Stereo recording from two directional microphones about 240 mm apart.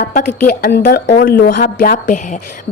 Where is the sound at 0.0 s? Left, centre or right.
Left.